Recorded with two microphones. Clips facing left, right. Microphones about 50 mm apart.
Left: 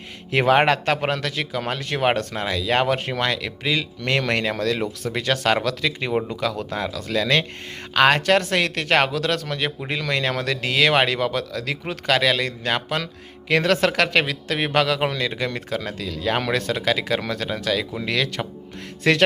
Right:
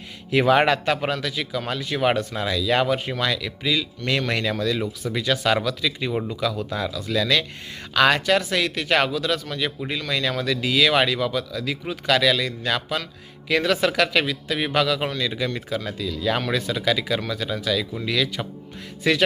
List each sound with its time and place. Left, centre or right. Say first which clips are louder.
0.3 s a man's voice: left 1 dB; left
2.1 s a man's voice: even; left
4.5 s a man's voice: left 1 dB; left
7.2 s a man's voice: left 1 dB; left
8.2 s a man's voice: left 2 dB; left
9.1 s speech: left 1 dB; left
9.9 s speech: left 3 dB; left
12.0 s a man's voice: even; left
13.5 s a man's voice: left 2 dB; left